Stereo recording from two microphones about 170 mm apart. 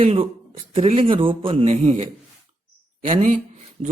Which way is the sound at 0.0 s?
35° right (ahead or behind).